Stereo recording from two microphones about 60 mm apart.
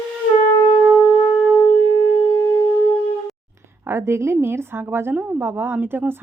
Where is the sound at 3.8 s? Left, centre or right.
Right.